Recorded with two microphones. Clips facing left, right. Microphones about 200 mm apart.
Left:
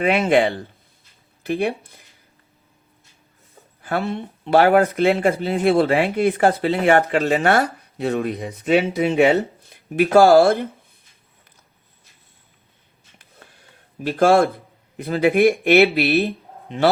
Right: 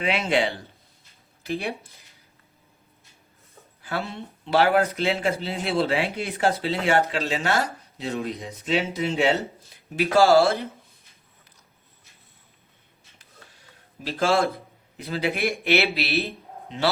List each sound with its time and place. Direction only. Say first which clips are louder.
0.0 s speech: left 7 dB; 50° left (ahead or behind)
3.8 s speech: left 7 dB; 55° left (ahead or behind)
14.0 s a man's voice: left 7 dB; 55° left (ahead or behind)